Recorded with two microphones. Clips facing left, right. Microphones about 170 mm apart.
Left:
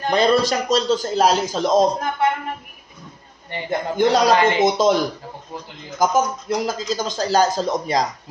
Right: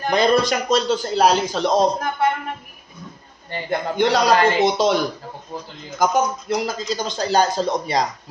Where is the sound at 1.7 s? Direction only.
20° left (ahead or behind).